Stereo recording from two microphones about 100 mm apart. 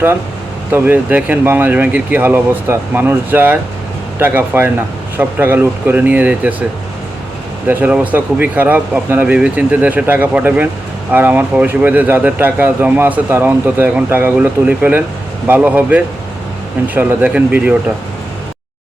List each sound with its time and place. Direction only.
0.7 s speech: 20° right (ahead or behind)
7.7 s speech: 15° right (ahead or behind)